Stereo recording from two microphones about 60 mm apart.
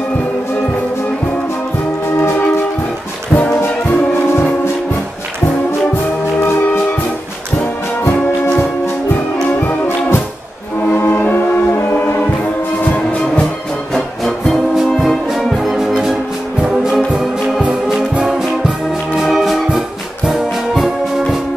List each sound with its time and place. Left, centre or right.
2.1 s music: left
3.3 s music: left
9.6 s music: left
12.9 s music: left
13.9 s music: centre
16.6 s brass instrument: centre
19.1 s music: centre